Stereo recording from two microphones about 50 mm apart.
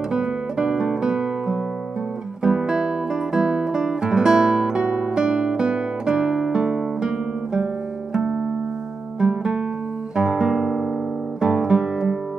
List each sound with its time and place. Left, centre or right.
0.1 s music: centre
3.3 s guitar: centre
8.1 s music: centre
10.1 s guitar: centre